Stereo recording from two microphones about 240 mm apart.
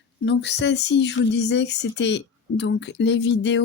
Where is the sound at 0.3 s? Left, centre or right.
Left.